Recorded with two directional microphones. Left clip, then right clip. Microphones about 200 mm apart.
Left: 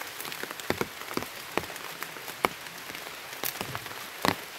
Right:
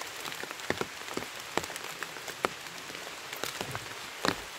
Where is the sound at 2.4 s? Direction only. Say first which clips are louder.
Left 4 dB; 30° left (ahead or behind).